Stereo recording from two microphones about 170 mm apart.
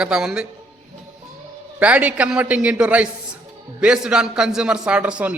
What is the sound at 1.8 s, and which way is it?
A man's voice, 10° right (ahead or behind).